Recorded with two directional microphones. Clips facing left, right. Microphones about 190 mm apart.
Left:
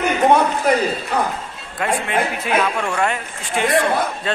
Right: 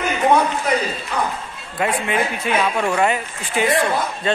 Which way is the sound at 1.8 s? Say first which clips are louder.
Even; centre (ahead or behind).